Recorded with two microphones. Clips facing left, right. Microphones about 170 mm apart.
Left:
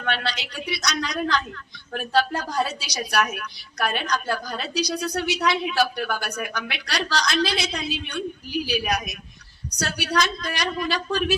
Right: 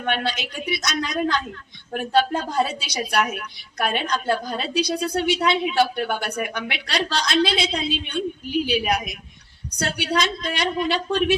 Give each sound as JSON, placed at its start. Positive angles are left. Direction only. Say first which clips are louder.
{"t": 0.0, "sound": "a woman's voice", "louder": "right 3 dB", "side_deg": -15}